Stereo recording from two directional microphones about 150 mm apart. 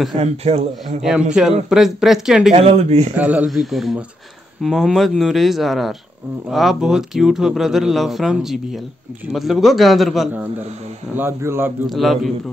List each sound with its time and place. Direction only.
0.1 s speech: 45° right (ahead or behind)
1.0 s speech: 5° right (ahead or behind)
2.5 s speech: 45° right (ahead or behind)
3.2 s speech: 10° right (ahead or behind)
11.1 s a man's voice: 15° right (ahead or behind)
11.9 s speech: centre (ahead or behind)